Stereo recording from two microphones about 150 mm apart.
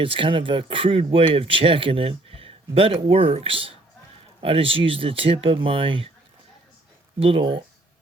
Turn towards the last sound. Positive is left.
turn(degrees=-35)  # may be behind; listen again after turning